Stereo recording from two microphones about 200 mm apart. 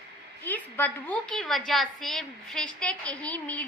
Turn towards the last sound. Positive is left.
turn(degrees=5)  # may be behind; listen again after turning